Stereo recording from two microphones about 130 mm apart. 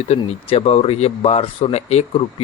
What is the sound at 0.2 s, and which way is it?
Speech, 50° left (ahead or behind).